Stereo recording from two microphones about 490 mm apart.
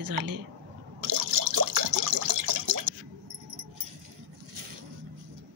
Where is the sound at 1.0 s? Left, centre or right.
Right.